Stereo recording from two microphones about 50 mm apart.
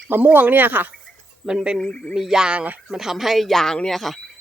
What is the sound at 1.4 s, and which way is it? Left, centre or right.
Speech, centre.